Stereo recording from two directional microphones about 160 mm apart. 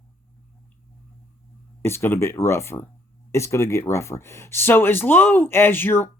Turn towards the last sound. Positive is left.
turn(degrees=15)  # may be behind; listen again after turning